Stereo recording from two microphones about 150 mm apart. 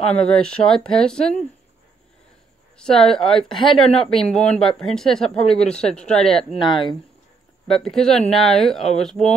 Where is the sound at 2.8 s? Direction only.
5° left (ahead or behind).